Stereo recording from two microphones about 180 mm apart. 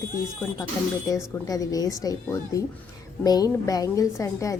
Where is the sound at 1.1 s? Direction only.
20° left (ahead or behind).